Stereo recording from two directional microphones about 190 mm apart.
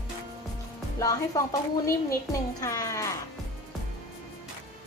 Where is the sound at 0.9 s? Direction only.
15° left (ahead or behind).